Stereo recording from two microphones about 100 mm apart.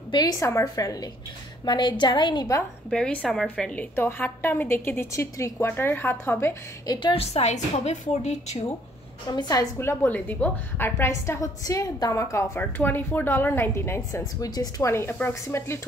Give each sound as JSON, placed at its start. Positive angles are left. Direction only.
{"t": 0.1, "sound": "a woman's voice", "side_deg": 40}
{"t": 1.7, "sound": "a woman's voice", "side_deg": 45}
{"t": 2.9, "sound": "a woman's voice", "side_deg": 10}
{"t": 6.9, "sound": "a woman's voice", "side_deg": 50}
{"t": 7.2, "sound": "a woman's voice", "side_deg": 90}
{"t": 9.3, "sound": "a woman's voice", "side_deg": 40}
{"t": 9.8, "sound": "a woman's voice", "side_deg": 20}
{"t": 12.5, "sound": "a woman's voice", "side_deg": 20}
{"t": 14.5, "sound": "a woman's voice", "side_deg": 40}
{"t": 14.9, "sound": "a woman's voice", "side_deg": 25}